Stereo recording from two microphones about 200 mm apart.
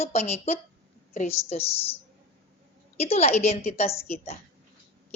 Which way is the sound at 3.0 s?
30° left (ahead or behind).